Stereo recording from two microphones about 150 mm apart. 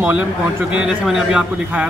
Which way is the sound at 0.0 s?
10° right (ahead or behind).